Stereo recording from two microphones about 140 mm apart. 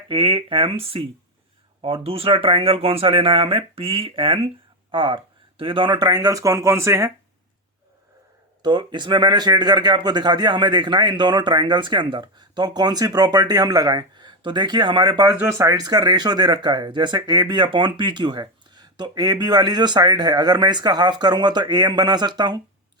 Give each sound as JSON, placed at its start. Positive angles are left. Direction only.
{"t": 0.1, "sound": "speech", "side_deg": -35}
{"t": 8.6, "sound": "speech", "side_deg": -30}